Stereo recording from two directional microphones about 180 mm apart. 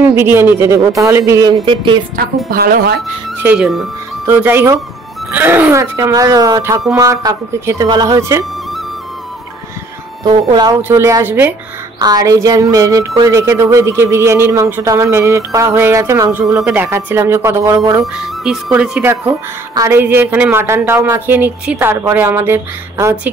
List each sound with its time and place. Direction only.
0.0 s speech: 15° right (ahead or behind)
1.7 s speech: 25° right (ahead or behind)
2.1 s speech: 55° right (ahead or behind)
3.3 s speech: 5° right (ahead or behind)
10.2 s speech: 20° right (ahead or behind)
18.2 s speech: 5° right (ahead or behind)